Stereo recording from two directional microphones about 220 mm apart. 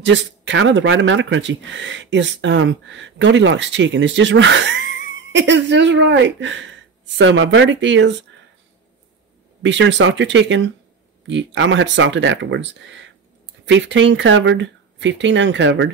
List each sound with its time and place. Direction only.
0.0 s speech: 55° right (ahead or behind)
9.6 s speech: 55° right (ahead or behind)